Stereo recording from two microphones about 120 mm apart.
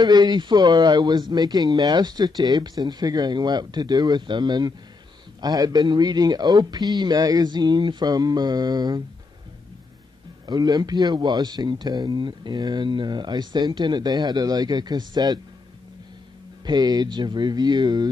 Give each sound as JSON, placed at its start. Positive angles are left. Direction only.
{"t": 0.0, "sound": "speech", "side_deg": -35}
{"t": 10.4, "sound": "speech", "side_deg": -35}
{"t": 16.6, "sound": "speech", "side_deg": -35}